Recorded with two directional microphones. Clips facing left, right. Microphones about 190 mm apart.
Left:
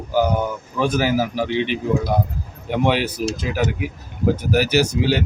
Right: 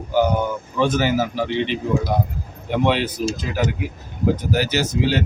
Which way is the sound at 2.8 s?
5° left (ahead or behind).